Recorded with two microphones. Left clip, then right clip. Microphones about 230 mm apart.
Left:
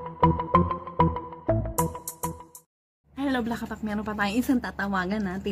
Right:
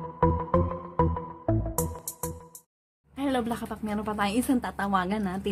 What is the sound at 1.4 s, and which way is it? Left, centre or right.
Music, centre.